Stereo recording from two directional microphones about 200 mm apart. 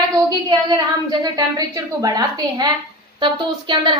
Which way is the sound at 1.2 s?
15° right (ahead or behind).